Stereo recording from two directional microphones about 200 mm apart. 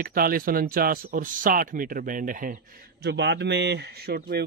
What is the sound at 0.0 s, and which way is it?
Speech, 45° right (ahead or behind).